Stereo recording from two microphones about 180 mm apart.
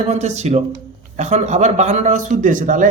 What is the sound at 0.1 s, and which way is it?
A man's voice, 40° right (ahead or behind).